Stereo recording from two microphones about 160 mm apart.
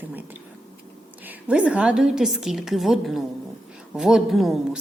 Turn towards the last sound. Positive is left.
turn(degrees=0)  # may be behind; listen again after turning